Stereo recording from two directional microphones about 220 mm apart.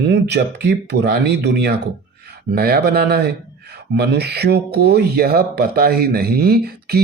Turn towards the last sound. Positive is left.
turn(degrees=-45)  # may be behind; listen again after turning